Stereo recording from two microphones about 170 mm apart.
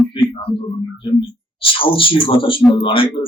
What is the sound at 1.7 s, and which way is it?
A man's voice, 30° left (ahead or behind).